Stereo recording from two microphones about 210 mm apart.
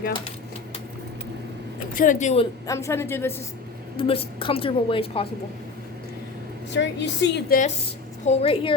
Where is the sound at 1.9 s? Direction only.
35° left (ahead or behind).